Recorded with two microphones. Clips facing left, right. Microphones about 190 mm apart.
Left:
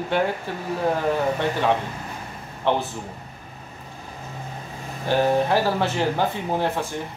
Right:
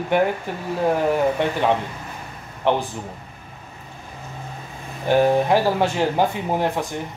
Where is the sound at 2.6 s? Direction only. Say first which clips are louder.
Right 2 dB; 15° right (ahead or behind).